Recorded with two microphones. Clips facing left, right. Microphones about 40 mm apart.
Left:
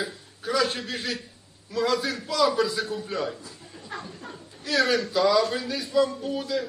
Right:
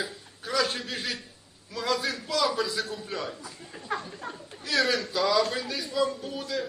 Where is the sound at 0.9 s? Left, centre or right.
Centre.